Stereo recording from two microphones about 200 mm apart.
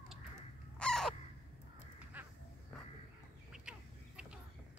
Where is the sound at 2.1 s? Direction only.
10° right (ahead or behind).